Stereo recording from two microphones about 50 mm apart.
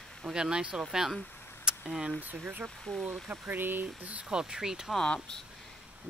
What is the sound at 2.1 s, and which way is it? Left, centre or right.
Speech, right.